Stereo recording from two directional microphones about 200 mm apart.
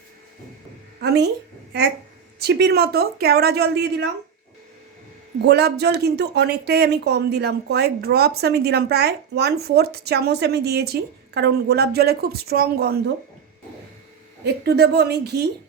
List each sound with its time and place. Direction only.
1.0 s a woman's voice: 55° right (ahead or behind)
2.4 s speech: 55° right (ahead or behind)
5.5 s speech: 55° right (ahead or behind)
14.4 s a woman's voice: 55° right (ahead or behind)